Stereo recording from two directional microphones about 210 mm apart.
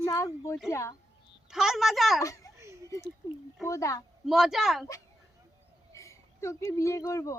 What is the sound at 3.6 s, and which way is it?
Speech, 15° left (ahead or behind).